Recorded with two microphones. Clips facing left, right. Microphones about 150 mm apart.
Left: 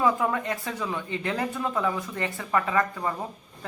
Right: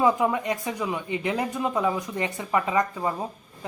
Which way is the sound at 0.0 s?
15° right (ahead or behind).